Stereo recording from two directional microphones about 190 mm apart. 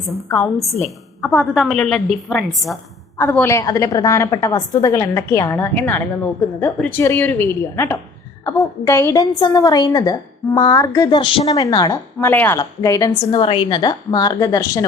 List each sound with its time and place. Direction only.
1.2 s a woman's voice: centre (ahead or behind)
3.2 s a woman's voice: 15° left (ahead or behind)